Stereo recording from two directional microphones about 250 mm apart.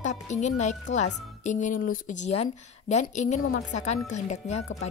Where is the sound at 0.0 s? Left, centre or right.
Left.